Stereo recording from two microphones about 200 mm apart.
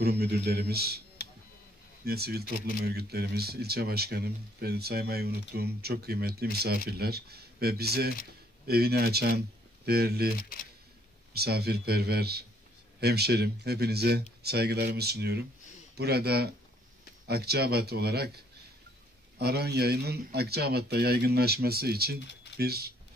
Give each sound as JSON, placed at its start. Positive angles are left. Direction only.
{"t": 0.0, "sound": "speech", "side_deg": -50}
{"t": 2.0, "sound": "speech", "side_deg": -50}
{"t": 11.3, "sound": "speech", "side_deg": -55}